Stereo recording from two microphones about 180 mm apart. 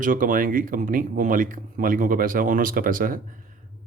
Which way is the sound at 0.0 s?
50° right (ahead or behind).